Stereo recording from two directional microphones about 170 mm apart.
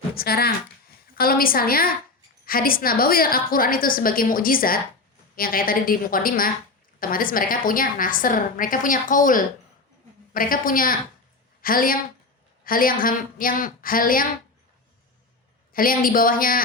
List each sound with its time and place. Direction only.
0.1 s a woman's voice: 60° left (ahead or behind)
15.7 s a woman's voice: 55° left (ahead or behind)